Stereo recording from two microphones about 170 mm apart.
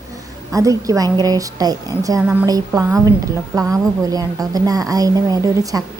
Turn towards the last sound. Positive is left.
turn(degrees=-20)  # may be behind; listen again after turning